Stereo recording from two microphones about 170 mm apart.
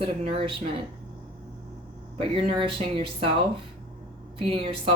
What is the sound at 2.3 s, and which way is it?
Speech, 30° right (ahead or behind).